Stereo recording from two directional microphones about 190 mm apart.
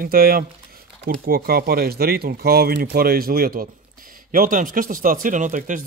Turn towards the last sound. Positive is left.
turn(degrees=-40)  # may be behind; listen again after turning